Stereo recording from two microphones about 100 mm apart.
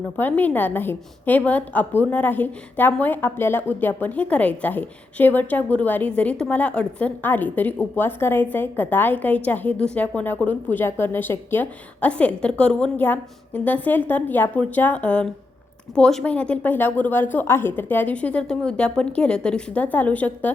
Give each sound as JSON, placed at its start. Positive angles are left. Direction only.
{"t": 0.2, "sound": "a woman's voice", "side_deg": 15}